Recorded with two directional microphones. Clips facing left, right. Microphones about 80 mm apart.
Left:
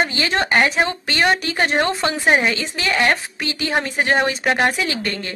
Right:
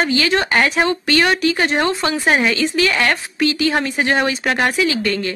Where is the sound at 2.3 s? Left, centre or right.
Left.